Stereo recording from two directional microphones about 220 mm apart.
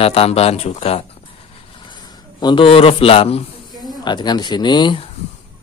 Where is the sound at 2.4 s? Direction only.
25° left (ahead or behind).